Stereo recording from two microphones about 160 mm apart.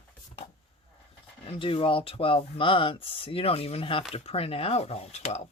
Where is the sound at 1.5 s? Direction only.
35° left (ahead or behind).